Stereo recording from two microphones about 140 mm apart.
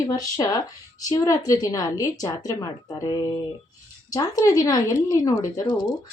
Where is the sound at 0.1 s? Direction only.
25° left (ahead or behind).